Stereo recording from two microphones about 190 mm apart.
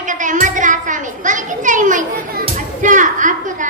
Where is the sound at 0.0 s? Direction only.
40° right (ahead or behind).